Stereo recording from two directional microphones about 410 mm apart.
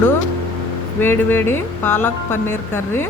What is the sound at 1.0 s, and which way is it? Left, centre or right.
A woman's voice, centre.